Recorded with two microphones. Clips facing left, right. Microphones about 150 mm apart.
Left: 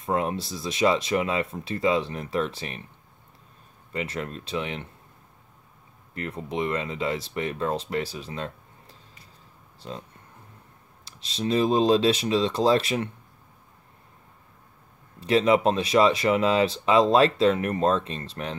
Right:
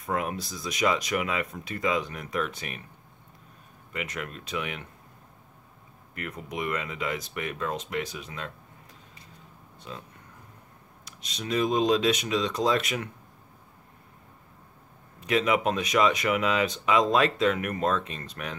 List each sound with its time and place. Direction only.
0.0 s speech: 30° left (ahead or behind)
3.9 s speech: 30° left (ahead or behind)
6.1 s speech: 30° left (ahead or behind)
9.8 s speech: 35° left (ahead or behind)
11.1 s speech: 30° left (ahead or behind)
15.1 s speech: 30° left (ahead or behind)